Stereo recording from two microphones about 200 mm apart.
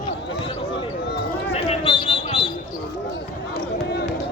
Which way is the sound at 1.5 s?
30° left (ahead or behind).